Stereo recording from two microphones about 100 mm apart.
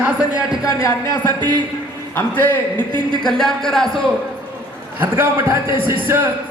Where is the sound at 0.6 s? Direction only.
35° left (ahead or behind).